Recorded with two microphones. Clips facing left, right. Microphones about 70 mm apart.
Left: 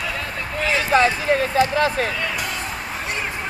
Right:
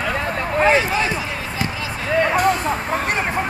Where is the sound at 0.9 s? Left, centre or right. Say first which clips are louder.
Left 5 dB; left.